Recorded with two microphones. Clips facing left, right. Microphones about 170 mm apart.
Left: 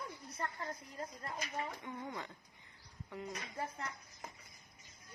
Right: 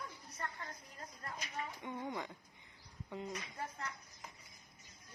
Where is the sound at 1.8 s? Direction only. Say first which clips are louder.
Right 2 dB; 20° right (ahead or behind).